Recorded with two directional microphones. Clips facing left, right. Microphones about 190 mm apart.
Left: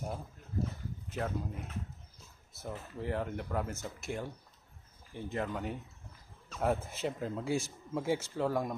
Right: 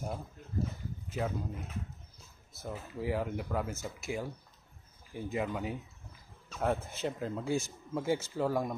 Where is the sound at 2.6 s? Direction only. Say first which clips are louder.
Right 2 dB; 5° right (ahead or behind).